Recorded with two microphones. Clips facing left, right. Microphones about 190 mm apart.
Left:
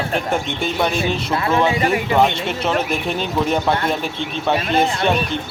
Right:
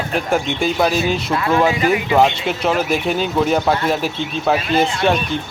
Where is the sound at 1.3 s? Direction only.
30° left (ahead or behind).